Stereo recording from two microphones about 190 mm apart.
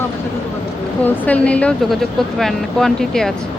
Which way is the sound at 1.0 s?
5° left (ahead or behind).